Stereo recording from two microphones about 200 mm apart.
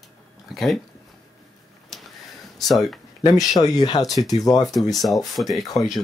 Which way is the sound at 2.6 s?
Centre (ahead or behind).